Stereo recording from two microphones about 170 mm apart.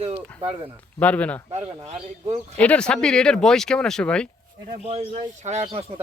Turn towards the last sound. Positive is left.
turn(degrees=-35)  # may be behind; listen again after turning